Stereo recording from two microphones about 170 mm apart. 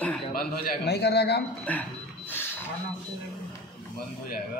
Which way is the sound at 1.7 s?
10° left (ahead or behind).